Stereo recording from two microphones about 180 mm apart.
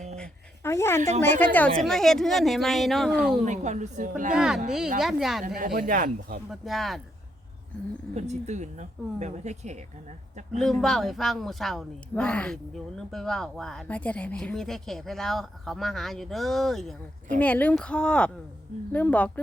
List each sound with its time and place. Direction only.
0.2 s a sound: 15° left (ahead or behind)
1.2 s speech: 10° left (ahead or behind)
3.4 s a woman's voice: 40° right (ahead or behind)
4.4 s speech: 5° right (ahead or behind)
5.5 s speech: 50° right (ahead or behind)
6.5 s speech: centre (ahead or behind)
8.1 s a woman's voice: 40° right (ahead or behind)
10.5 s speech: centre (ahead or behind)